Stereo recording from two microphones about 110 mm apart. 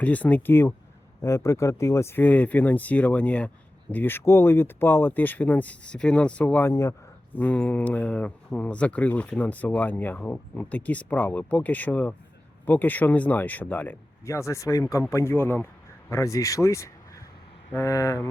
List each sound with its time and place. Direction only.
0.0 s speech: 15° left (ahead or behind)
7.3 s speech: 15° left (ahead or behind)
14.3 s speech: 25° left (ahead or behind)